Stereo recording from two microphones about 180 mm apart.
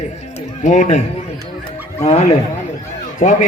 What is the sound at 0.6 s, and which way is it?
A man's voice, 45° left (ahead or behind).